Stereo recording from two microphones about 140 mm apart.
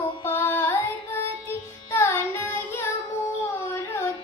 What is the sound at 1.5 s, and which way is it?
Music, 20° left (ahead or behind).